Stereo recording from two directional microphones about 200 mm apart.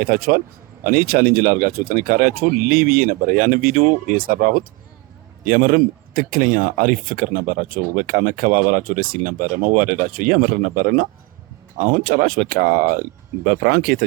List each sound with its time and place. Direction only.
0.0 s speech: 50° right (ahead or behind)